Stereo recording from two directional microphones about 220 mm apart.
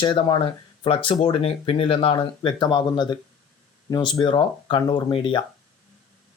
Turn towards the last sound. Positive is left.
turn(degrees=20)  # may be behind; listen again after turning